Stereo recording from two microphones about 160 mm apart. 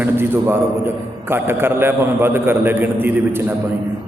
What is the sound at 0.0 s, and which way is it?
A man's voice, 15° right (ahead or behind).